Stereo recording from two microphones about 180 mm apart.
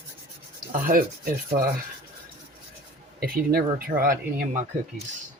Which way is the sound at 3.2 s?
55° right (ahead or behind).